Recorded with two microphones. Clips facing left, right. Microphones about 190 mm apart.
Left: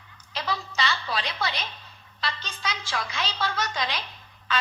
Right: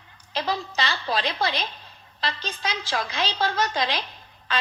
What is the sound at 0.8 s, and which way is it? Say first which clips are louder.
A woman's voice: right 2 dB; 35° right (ahead or behind).